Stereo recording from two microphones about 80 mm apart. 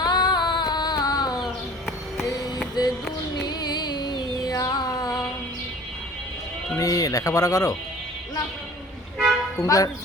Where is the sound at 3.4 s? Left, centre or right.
Left.